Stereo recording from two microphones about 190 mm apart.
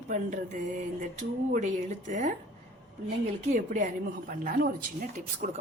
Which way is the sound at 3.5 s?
40° right (ahead or behind).